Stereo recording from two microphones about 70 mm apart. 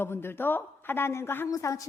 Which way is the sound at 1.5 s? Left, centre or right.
Left.